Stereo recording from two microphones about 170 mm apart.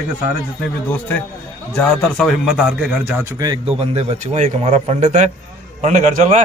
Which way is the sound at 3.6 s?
35° right (ahead or behind).